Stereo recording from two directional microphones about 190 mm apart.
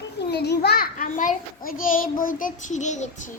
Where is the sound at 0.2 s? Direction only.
60° left (ahead or behind).